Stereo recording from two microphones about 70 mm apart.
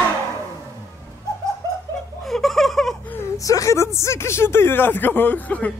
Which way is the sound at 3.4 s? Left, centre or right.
Left.